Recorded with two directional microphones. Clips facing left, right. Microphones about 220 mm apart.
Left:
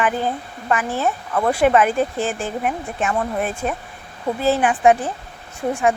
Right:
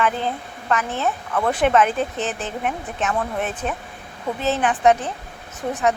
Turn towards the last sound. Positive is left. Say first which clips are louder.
# left 2 dB
turn(degrees=15)  # may be behind; listen again after turning